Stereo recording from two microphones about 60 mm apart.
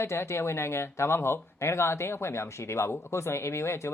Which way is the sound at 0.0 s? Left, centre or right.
Left.